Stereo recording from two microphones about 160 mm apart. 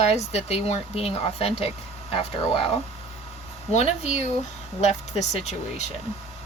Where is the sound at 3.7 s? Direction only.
45° left (ahead or behind).